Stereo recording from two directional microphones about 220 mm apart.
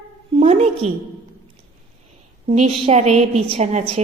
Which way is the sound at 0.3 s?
30° right (ahead or behind).